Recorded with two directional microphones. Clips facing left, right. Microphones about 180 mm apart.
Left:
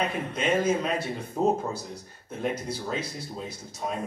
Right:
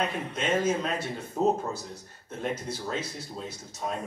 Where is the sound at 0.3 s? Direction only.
10° left (ahead or behind).